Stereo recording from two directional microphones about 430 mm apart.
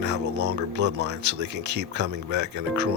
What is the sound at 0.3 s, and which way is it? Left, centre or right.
Speech, right.